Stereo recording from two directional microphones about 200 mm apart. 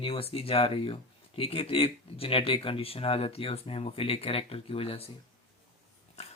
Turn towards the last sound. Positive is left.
turn(degrees=35)  # may be behind; listen again after turning